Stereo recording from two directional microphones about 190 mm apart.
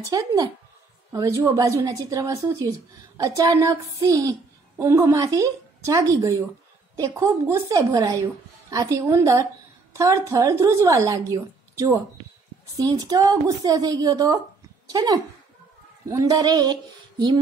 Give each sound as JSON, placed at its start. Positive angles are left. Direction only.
{"t": 0.1, "sound": "a woman's voice", "side_deg": -20}